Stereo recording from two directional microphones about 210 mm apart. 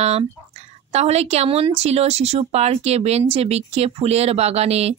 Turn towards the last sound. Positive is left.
turn(degrees=-30)  # may be behind; listen again after turning